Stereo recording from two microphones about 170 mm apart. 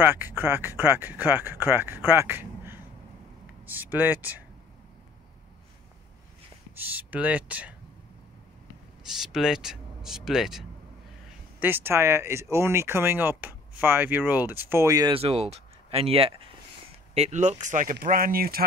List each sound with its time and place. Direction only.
0.0 s speech: 10° right (ahead or behind)
6.8 s speech: 10° right (ahead or behind)
9.2 s speech: 5° right (ahead or behind)
11.6 s speech: 15° right (ahead or behind)
15.1 s speech: 35° right (ahead or behind); by 18.6 s 60° right (ahead or behind)